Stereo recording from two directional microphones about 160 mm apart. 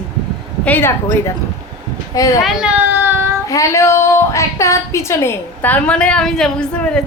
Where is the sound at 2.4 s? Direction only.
Centre (ahead or behind).